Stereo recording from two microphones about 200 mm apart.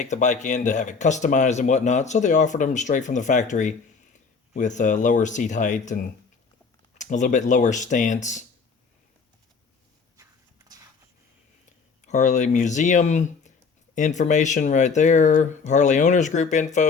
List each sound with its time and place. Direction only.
0.0 s speech: 35° left (ahead or behind)
10.2 s walk: 15° right (ahead or behind)
11.6 s speech: 35° left (ahead or behind)